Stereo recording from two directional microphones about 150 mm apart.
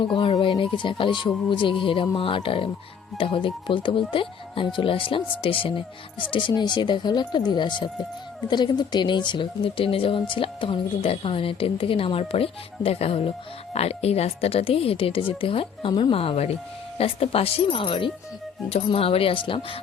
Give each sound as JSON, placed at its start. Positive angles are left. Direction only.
{"t": 0.0, "sound": "speech", "side_deg": 35}